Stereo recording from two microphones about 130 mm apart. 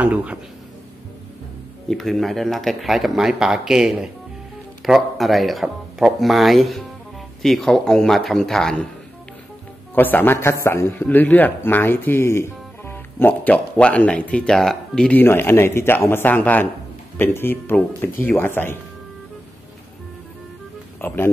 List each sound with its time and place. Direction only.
0.0 s speech: 10° right (ahead or behind)
1.9 s speech: centre (ahead or behind)
9.9 s speech: 15° left (ahead or behind)
21.0 s speech: 15° left (ahead or behind)